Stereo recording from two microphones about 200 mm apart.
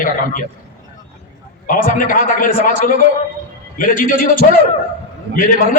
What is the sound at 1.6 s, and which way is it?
A man's voice, 40° left (ahead or behind).